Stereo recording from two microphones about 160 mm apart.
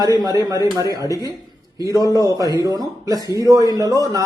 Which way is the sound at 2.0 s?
25° left (ahead or behind).